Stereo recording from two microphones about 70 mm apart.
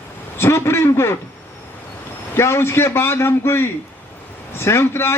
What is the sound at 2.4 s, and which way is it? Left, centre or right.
A man's voice, left.